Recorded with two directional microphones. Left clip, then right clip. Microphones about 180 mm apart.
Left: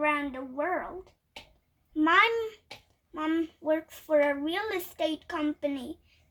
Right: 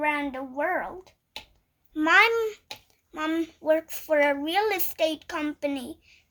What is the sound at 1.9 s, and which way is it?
A child's voice, 55° right (ahead or behind).